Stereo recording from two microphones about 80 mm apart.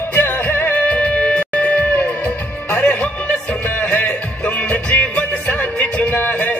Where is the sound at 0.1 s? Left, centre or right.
Left.